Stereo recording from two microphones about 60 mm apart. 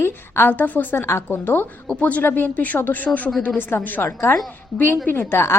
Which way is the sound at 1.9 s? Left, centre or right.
Left.